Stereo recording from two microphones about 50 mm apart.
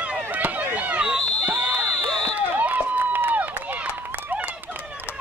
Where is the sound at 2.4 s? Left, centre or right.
Right.